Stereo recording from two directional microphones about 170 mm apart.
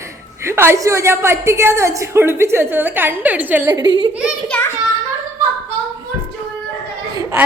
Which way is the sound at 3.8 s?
25° right (ahead or behind).